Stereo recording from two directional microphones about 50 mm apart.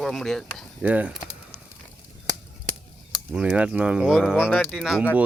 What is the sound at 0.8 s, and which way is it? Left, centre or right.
Speech, right.